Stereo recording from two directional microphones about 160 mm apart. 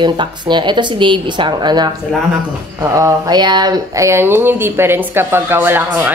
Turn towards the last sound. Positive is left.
turn(degrees=-15)  # may be behind; listen again after turning